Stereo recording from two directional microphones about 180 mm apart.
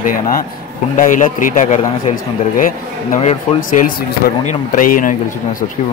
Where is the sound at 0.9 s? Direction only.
50° left (ahead or behind).